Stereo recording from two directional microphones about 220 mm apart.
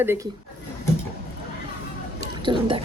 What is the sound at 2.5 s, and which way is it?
Speech, 20° right (ahead or behind).